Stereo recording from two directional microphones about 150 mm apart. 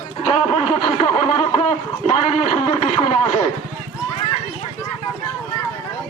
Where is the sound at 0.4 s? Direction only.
45° left (ahead or behind).